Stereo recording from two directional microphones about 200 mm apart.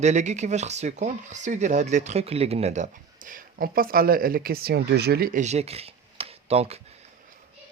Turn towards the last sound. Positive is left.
turn(degrees=-30)  # may be behind; listen again after turning